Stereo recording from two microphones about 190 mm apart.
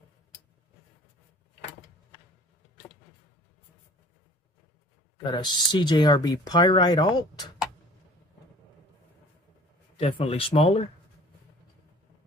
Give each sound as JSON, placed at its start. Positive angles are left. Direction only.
{"t": 5.1, "sound": "speech", "side_deg": 20}
{"t": 9.9, "sound": "speech", "side_deg": 30}